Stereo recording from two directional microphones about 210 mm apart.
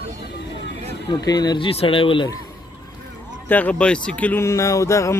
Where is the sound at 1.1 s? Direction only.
20° left (ahead or behind).